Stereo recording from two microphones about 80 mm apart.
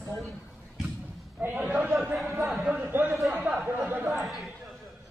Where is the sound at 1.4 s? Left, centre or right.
Right.